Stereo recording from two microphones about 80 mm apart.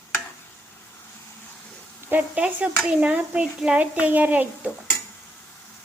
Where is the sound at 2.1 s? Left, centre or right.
Centre.